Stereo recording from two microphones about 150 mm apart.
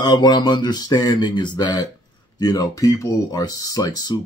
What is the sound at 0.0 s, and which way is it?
Speech, 30° left (ahead or behind).